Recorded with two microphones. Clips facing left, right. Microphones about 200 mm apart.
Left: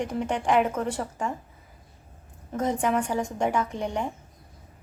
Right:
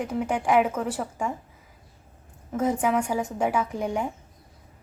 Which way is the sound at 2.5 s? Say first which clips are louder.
Right 1 dB; 5° right (ahead or behind).